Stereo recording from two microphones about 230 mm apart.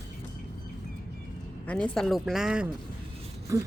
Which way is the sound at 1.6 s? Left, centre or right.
Centre.